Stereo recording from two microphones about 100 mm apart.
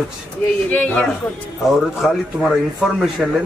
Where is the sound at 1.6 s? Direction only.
5° right (ahead or behind).